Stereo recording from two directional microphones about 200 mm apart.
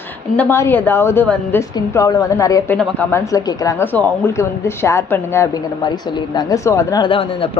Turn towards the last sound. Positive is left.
turn(degrees=25)  # may be behind; listen again after turning